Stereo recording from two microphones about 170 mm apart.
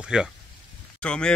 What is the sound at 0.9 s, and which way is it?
Speech, 5° left (ahead or behind).